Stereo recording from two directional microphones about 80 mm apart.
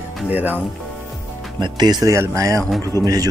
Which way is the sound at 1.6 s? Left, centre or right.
Right.